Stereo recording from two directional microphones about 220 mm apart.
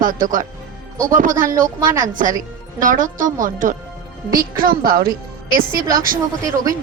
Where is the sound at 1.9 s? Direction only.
35° right (ahead or behind).